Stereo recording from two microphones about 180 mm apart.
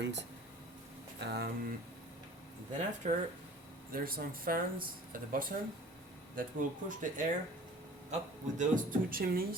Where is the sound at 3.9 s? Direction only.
55° right (ahead or behind).